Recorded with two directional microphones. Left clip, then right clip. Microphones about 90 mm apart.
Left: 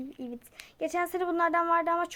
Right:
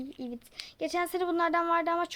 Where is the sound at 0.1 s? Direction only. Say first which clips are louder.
Even; 40° right (ahead or behind).